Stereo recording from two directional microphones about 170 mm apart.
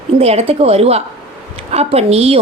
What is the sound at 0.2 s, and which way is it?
A woman's voice, 35° right (ahead or behind).